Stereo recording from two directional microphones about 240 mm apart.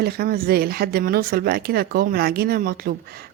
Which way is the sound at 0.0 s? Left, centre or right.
Right.